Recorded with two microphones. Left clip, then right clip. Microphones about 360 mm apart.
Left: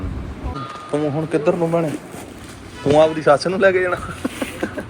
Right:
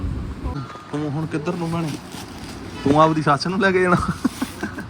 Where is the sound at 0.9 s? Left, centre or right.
Centre.